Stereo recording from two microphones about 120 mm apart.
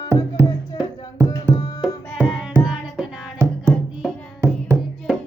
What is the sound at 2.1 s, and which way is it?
Music, 5° right (ahead or behind).